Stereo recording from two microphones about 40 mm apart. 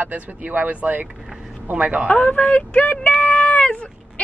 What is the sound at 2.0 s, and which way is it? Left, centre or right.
A woman's voice, left.